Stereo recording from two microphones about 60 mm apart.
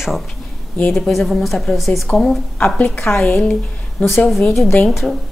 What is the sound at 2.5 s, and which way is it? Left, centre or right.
Speech, left.